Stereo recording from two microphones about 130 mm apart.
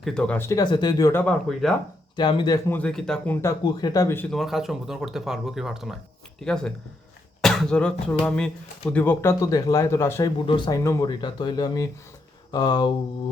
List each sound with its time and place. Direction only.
0.0 s speech: 5° left (ahead or behind)
0.4 s speech: 30° left (ahead or behind)
1.2 s speech: 5° left (ahead or behind)
2.1 s speech: 35° left (ahead or behind)
2.6 s speech: 10° left (ahead or behind)
3.6 s speech: 30° left (ahead or behind)
4.3 s speech: centre (ahead or behind); by 9.3 s 15° left (ahead or behind)
9.4 s speech: 25° left (ahead or behind)
10.3 s speech: 40° left (ahead or behind)
10.7 s speech: 25° left (ahead or behind)